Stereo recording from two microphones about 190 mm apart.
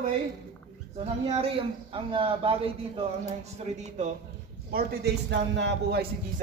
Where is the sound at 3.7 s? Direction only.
35° right (ahead or behind).